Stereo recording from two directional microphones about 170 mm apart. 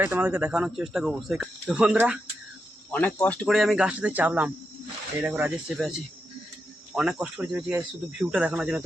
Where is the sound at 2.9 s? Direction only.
10° left (ahead or behind).